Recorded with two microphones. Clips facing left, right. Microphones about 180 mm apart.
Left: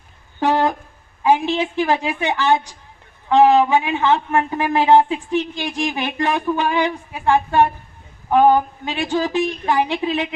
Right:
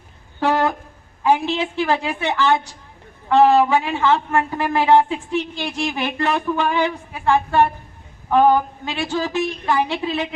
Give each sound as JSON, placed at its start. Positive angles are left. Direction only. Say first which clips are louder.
{"t": 0.3, "sound": "wind instrument", "louder": "left 1 dB", "side_deg": 15}
{"t": 1.2, "sound": "a man's voice", "louder": "left 1 dB", "side_deg": 15}